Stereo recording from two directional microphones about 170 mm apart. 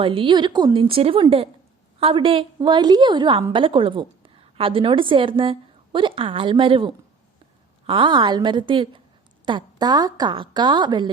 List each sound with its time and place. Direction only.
0.0 s a woman's voice: 30° right (ahead or behind)